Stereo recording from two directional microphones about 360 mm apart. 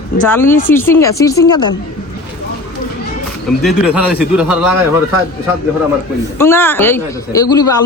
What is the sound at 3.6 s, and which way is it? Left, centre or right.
Speech, centre.